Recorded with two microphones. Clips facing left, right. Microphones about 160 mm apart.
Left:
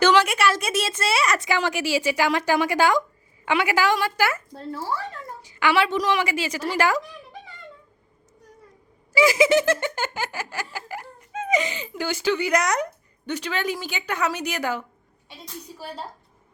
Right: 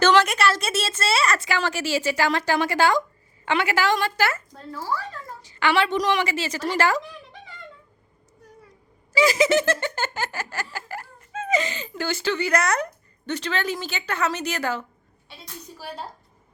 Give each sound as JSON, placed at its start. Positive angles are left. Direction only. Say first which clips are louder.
{"t": 0.0, "sound": "a woman's voice", "louder": "even", "side_deg": 10}
{"t": 3.4, "sound": "giggle", "louder": "left 1 dB", "side_deg": 10}
{"t": 4.5, "sound": "a child's voice", "louder": "left 1 dB", "side_deg": 30}
{"t": 5.4, "sound": "giggle", "louder": "left 1 dB", "side_deg": 10}
{"t": 9.1, "sound": "giggle", "louder": "left 1 dB", "side_deg": 10}